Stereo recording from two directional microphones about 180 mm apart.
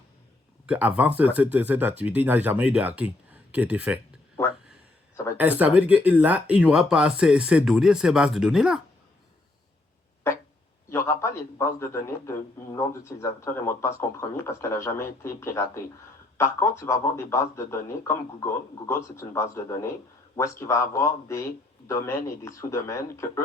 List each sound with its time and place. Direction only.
0.7 s speech: 5° right (ahead or behind)
5.4 s speech: 10° right (ahead or behind)
10.9 s speech: 15° left (ahead or behind)